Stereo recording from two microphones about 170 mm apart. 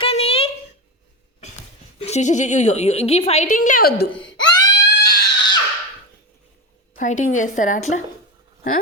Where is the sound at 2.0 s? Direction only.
40° left (ahead or behind); by 4.1 s 60° left (ahead or behind).